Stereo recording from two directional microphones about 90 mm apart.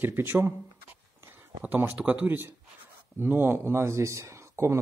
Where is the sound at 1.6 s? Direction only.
20° right (ahead or behind).